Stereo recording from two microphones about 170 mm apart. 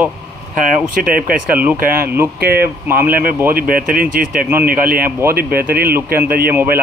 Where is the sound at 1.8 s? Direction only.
60° right (ahead or behind).